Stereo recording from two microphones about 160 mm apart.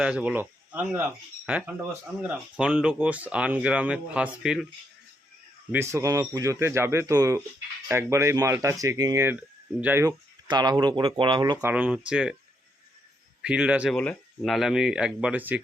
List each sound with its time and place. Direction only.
0.0 s speech: 5° right (ahead or behind)
5.7 s speech: 20° right (ahead or behind)
11.6 s speech: 10° right (ahead or behind)
13.4 s speech: 5° right (ahead or behind)
13.9 s speech: 5° left (ahead or behind); by 15.6 s 10° right (ahead or behind)